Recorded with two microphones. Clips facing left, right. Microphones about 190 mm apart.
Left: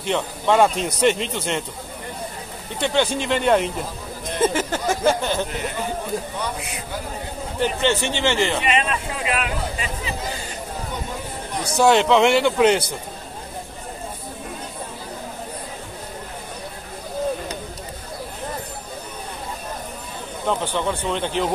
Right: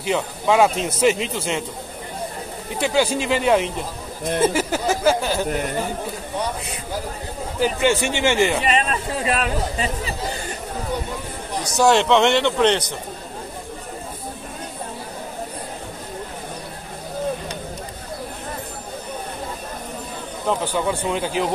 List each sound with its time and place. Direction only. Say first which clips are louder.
0.0 s a man's voice: right 1 dB; 5° right (ahead or behind)
2.8 s a man's voice: right 1 dB; 5° right (ahead or behind)
7.5 s speech: right 2 dB; 5° right (ahead or behind)
8.6 s speech: right 1 dB; 40° right (ahead or behind)
11.7 s a man's voice: even; centre (ahead or behind)
20.4 s speech: right 1 dB; 10° right (ahead or behind)